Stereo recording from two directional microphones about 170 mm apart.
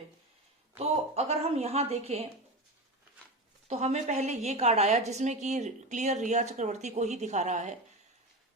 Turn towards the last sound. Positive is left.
turn(degrees=-45)  # may be behind; listen again after turning